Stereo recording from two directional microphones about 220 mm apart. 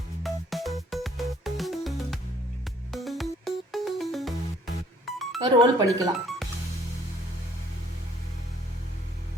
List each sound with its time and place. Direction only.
0.2 s music: centre (ahead or behind)
5.4 s speech: 15° right (ahead or behind)